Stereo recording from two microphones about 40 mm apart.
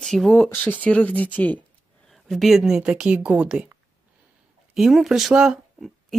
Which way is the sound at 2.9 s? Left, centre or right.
Right.